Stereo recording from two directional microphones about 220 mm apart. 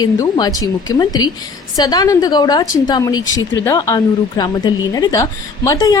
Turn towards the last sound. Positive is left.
turn(degrees=15)  # may be behind; listen again after turning